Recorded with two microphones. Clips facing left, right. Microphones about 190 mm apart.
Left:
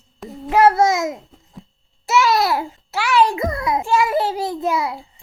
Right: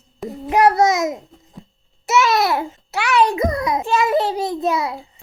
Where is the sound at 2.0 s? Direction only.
20° right (ahead or behind).